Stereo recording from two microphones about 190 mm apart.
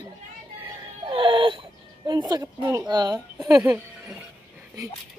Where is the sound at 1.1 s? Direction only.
30° right (ahead or behind).